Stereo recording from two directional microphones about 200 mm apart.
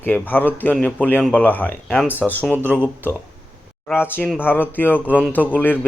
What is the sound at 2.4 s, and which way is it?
Speech, 10° right (ahead or behind).